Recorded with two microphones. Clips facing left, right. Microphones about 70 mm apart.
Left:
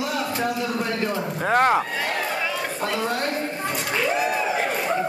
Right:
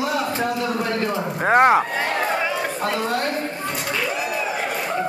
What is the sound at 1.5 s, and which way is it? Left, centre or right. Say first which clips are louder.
Speech: right 4 dB; right.